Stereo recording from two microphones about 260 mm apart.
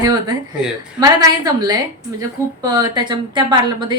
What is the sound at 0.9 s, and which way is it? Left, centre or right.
A woman's voice, centre.